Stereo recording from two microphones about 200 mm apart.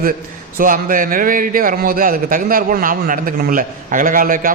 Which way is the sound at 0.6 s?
45° right (ahead or behind).